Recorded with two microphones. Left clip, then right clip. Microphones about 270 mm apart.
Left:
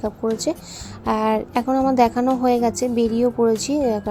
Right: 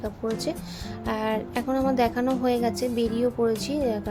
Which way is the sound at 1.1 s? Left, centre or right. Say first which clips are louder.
Left 7 dB; centre.